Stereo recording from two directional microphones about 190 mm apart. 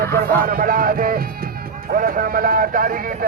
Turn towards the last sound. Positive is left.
turn(degrees=-45)  # may be behind; listen again after turning